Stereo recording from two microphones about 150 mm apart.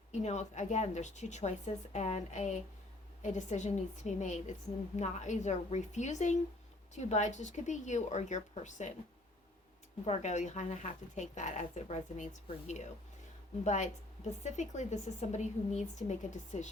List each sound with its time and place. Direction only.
0.1 s a woman's voice: 50° left (ahead or behind)
10.1 s a woman's voice: 50° left (ahead or behind)